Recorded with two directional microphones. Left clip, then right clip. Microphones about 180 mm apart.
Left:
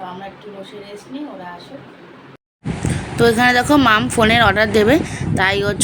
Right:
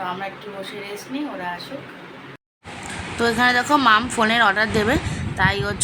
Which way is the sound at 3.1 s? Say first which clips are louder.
Left 5 dB; 15° left (ahead or behind).